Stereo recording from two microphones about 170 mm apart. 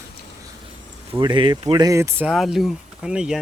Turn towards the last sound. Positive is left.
turn(degrees=-5)  # may be behind; listen again after turning